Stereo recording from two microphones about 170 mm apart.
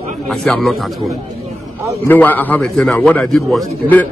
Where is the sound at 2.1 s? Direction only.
10° left (ahead or behind).